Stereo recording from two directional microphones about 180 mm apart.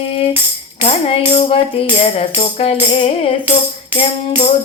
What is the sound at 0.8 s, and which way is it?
Music, 35° left (ahead or behind).